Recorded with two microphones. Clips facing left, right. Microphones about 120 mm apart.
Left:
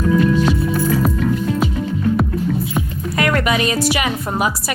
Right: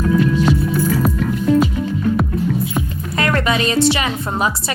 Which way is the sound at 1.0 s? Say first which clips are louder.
Right 1 dB; centre (ahead or behind).